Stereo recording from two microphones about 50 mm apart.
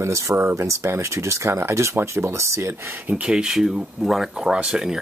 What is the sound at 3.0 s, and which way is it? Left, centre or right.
Speech, right.